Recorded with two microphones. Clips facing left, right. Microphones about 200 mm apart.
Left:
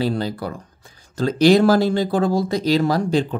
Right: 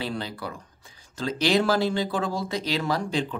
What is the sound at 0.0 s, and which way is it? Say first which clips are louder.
Speech: left 9 dB; 40° left (ahead or behind).